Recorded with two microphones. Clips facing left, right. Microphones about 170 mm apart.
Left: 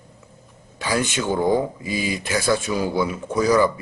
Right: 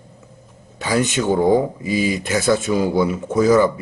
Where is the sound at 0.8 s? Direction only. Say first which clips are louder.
Right 4 dB; 20° right (ahead or behind).